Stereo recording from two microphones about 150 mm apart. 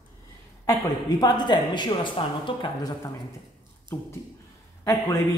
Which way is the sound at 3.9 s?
15° left (ahead or behind).